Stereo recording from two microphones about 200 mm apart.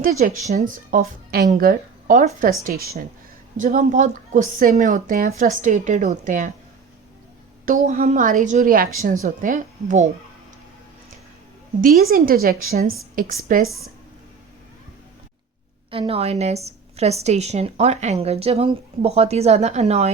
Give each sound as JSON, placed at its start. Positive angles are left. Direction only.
{"t": 0.0, "sound": "a woman's voice", "side_deg": -40}
{"t": 7.6, "sound": "a woman's voice", "side_deg": -40}
{"t": 11.8, "sound": "speech", "side_deg": -45}
{"t": 15.9, "sound": "a woman's voice", "side_deg": -30}